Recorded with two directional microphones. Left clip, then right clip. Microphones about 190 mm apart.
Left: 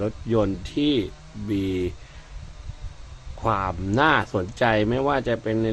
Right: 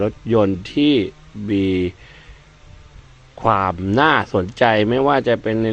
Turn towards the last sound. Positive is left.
turn(degrees=-15)  # may be behind; listen again after turning